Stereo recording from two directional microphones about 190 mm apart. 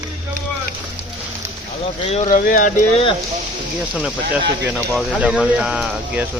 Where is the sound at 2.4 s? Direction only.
45° left (ahead or behind).